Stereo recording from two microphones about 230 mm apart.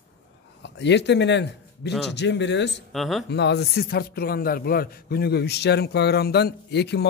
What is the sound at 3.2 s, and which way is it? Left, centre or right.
A man's voice, left.